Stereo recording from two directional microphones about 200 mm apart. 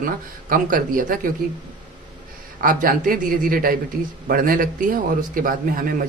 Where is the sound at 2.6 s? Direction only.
45° right (ahead or behind).